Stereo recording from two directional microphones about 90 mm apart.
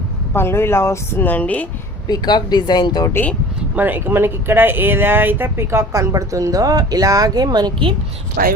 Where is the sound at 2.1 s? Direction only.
55° left (ahead or behind).